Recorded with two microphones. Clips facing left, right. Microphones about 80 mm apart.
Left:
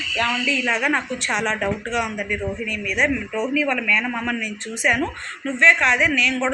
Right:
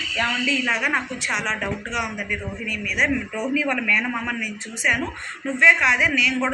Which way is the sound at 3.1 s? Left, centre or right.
Centre.